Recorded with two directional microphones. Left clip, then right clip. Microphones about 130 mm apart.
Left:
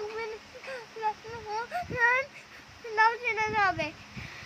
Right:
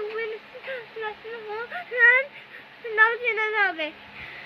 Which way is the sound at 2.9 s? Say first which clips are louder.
Right 4 dB; 20° left (ahead or behind).